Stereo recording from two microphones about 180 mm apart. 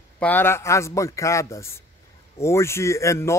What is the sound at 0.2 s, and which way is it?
Speech, 10° left (ahead or behind).